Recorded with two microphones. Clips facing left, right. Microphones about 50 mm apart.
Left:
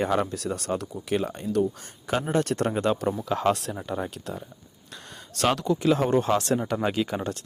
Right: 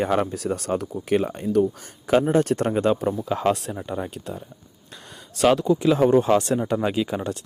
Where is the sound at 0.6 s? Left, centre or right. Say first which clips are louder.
Right 4 dB; right.